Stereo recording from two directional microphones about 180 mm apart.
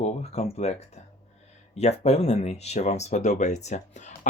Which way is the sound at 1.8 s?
35° left (ahead or behind).